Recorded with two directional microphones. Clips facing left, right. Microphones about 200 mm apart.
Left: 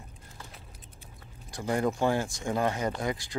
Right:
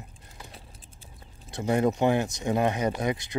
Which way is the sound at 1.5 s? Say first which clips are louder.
Right 4 dB; 25° right (ahead or behind).